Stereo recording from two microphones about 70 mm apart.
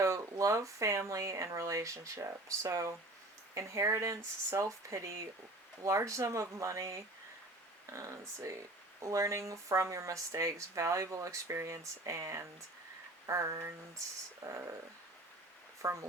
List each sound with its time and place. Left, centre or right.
0.0 s speech: right
15.8 s speech: right